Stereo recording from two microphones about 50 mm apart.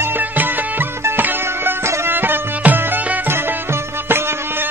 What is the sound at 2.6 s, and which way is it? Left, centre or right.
Music, right.